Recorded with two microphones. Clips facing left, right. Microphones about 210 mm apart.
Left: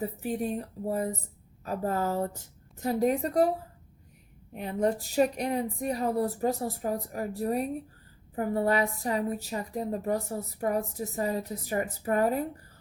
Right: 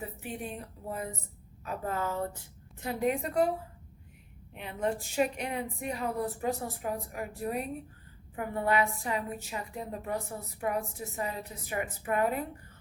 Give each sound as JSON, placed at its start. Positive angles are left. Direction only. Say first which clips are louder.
{"t": 0.0, "sound": "a woman's voice", "louder": "left 8 dB", "side_deg": 40}
{"t": 4.5, "sound": "a woman's voice", "louder": "left 5 dB", "side_deg": 40}